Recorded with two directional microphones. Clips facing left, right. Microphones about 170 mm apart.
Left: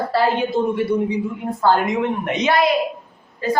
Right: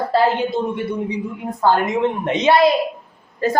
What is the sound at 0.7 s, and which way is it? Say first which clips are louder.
A woman's voice: left 4 dB; 20° right (ahead or behind).